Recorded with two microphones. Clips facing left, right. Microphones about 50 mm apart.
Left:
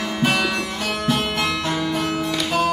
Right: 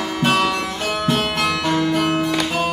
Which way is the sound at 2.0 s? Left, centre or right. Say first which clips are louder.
Right 4 dB; right.